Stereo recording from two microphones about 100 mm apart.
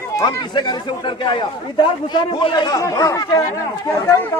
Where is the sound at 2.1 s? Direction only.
50° left (ahead or behind).